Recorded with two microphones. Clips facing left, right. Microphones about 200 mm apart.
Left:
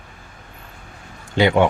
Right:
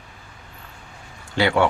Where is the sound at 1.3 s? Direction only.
20° left (ahead or behind).